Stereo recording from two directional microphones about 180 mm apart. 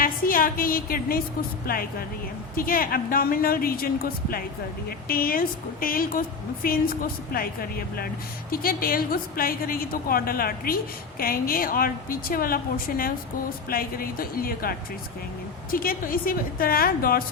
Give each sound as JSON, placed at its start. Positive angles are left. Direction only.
{"t": 0.0, "sound": "a woman's voice", "side_deg": 50}